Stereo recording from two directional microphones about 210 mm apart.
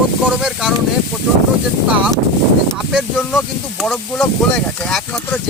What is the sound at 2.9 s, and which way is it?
Speech, centre (ahead or behind).